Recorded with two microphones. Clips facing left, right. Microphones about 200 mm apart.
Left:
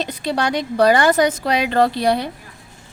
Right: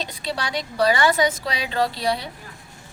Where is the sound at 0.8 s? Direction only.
45° left (ahead or behind).